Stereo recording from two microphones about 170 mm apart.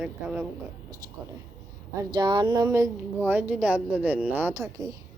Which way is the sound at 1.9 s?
25° right (ahead or behind).